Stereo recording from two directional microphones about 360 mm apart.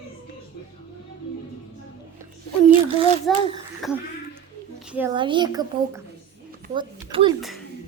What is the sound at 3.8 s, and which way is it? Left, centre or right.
A woman's voice, centre.